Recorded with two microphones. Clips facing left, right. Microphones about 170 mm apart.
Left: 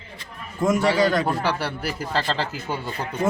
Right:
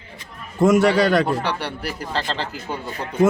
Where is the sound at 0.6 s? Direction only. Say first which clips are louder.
Right 4 dB; 75° right (ahead or behind).